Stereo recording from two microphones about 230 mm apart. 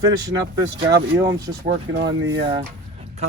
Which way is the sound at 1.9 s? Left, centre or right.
Right.